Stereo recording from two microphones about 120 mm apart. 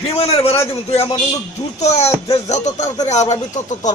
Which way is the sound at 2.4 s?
75° left (ahead or behind).